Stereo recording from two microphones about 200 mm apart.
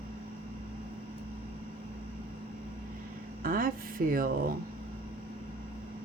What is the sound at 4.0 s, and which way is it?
Speech, 45° right (ahead or behind).